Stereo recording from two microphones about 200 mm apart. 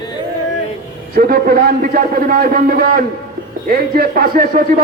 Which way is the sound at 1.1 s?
50° right (ahead or behind).